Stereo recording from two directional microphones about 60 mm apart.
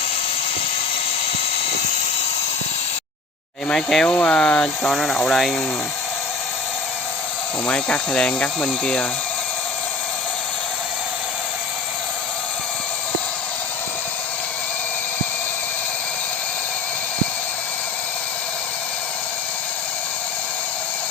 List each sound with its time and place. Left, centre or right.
3.7 s speech: centre
7.7 s speech: centre